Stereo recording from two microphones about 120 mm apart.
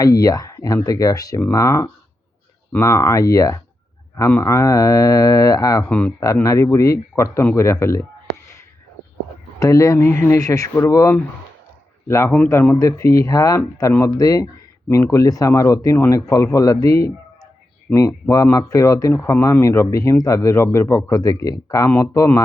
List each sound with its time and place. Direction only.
0.0 s speech: 30° left (ahead or behind)
5.9 s speech: 10° left (ahead or behind)
6.4 s speech: 25° left (ahead or behind)
9.6 s speech: 25° left (ahead or behind)